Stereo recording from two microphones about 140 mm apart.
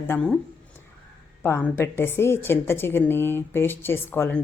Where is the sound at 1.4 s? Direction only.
15° left (ahead or behind).